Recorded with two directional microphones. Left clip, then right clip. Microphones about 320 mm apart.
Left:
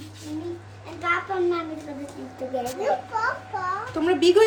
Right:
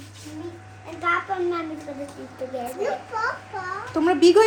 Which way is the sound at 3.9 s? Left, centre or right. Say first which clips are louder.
Right 3 dB; centre.